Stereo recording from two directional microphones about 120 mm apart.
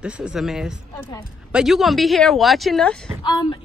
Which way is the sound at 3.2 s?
40° left (ahead or behind).